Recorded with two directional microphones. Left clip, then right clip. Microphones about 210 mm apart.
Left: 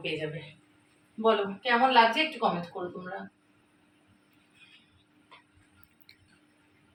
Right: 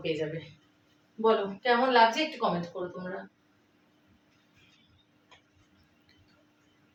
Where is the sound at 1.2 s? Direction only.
20° right (ahead or behind).